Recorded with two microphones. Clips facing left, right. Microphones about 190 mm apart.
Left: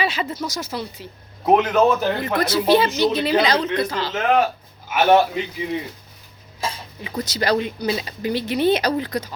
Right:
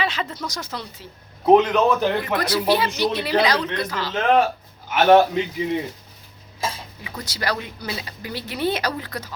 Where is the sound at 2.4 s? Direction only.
25° left (ahead or behind).